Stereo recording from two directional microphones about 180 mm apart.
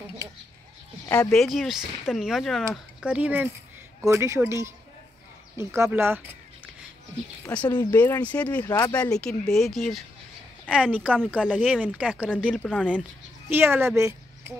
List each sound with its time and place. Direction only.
1.0 s speech: 15° left (ahead or behind)
1.3 s speech: centre (ahead or behind)
7.4 s speech: 10° left (ahead or behind)
8.6 s speech: 20° left (ahead or behind)
9.0 s speech: 5° left (ahead or behind)
12.5 s speech: 5° left (ahead or behind)
13.5 s speech: 10° right (ahead or behind)